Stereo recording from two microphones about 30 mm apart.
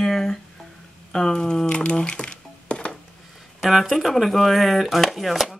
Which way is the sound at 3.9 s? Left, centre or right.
Centre.